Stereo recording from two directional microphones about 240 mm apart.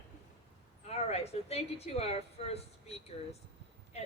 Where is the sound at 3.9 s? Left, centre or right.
Left.